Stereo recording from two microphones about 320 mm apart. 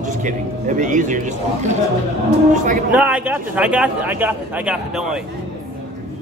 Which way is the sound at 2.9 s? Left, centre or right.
Centre.